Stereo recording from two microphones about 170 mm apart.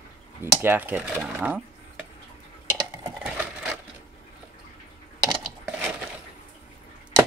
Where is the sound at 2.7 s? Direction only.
20° right (ahead or behind).